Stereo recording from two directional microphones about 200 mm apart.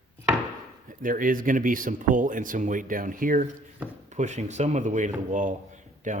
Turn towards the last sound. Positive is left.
turn(degrees=-40)  # may be behind; listen again after turning